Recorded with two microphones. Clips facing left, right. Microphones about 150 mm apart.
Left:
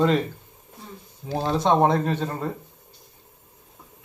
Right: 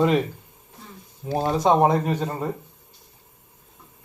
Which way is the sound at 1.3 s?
10° right (ahead or behind).